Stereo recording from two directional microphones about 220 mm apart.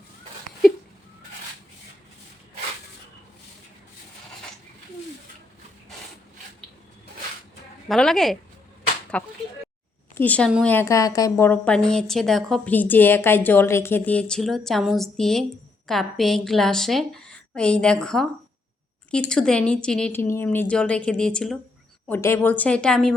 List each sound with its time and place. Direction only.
7.9 s a woman's voice: centre (ahead or behind)